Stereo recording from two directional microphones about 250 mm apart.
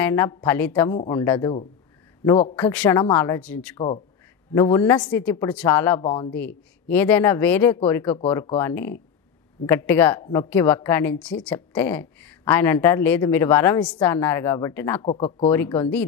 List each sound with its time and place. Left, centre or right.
0.0 s a woman's voice: centre
6.0 s speech: centre
6.3 s a woman's voice: centre
15.0 s speech: left
15.5 s a woman's voice: centre